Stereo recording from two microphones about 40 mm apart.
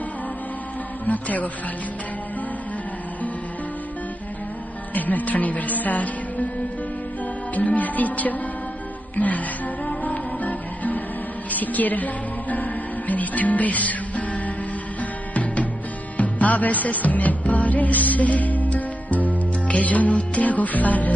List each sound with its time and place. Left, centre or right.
1.0 s speech: left
4.9 s speech: left
7.5 s speech: left
9.1 s music: left